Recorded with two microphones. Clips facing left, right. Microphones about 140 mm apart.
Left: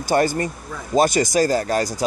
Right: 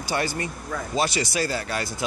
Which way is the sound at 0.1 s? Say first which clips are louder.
Left 8 dB; 45° left (ahead or behind).